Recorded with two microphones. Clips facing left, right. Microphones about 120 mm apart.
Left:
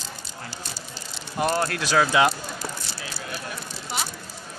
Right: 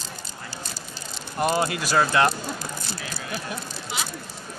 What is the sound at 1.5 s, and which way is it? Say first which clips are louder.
Speech: left 1 dB; 10° right (ahead or behind).